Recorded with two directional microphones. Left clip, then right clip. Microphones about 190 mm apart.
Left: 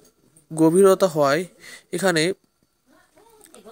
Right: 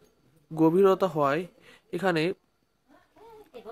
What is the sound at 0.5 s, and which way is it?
Speech, 20° left (ahead or behind).